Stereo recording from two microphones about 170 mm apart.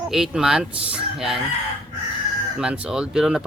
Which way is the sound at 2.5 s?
5° right (ahead or behind).